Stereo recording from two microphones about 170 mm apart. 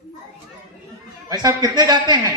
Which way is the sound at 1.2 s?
20° right (ahead or behind).